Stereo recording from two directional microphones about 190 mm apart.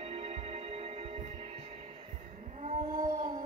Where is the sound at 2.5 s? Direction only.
45° right (ahead or behind).